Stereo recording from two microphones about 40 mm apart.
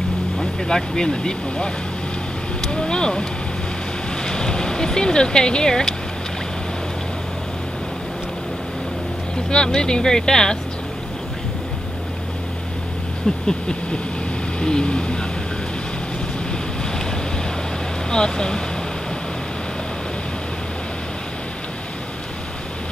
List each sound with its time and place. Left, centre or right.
0.4 s speech: centre
2.6 s a sound: left
4.2 s speech: centre
9.5 s speech: centre
13.5 s vehicle: left
14.6 s speech: left
18.1 s speech: centre